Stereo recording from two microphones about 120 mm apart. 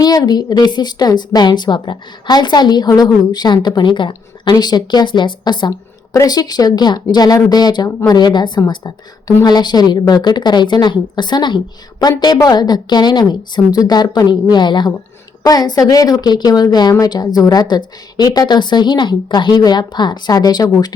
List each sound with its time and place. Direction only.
0.0 s a woman's voice: 35° left (ahead or behind)